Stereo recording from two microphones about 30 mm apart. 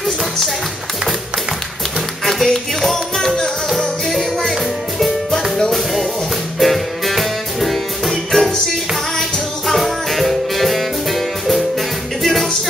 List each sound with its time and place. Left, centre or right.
2.4 s music: centre
6.6 s music: centre
8.1 s music: centre
9.8 s music: centre